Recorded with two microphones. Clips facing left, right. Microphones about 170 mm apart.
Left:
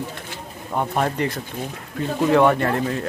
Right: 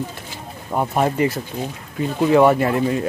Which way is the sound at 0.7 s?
5° right (ahead or behind).